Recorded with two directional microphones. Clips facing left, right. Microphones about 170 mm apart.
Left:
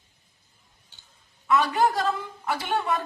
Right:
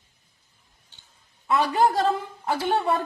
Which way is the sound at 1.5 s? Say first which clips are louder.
Right 1 dB; 30° right (ahead or behind).